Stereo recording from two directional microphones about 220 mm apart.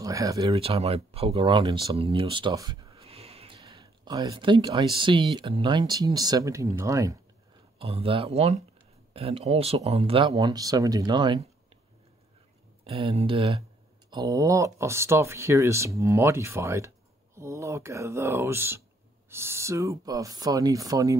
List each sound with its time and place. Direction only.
0.0 s speech: 15° right (ahead or behind)
0.5 s speech: 25° right (ahead or behind)
7.8 s speech: 25° right (ahead or behind)
12.8 s speech: 25° right (ahead or behind)
14.1 s speech: 15° right (ahead or behind)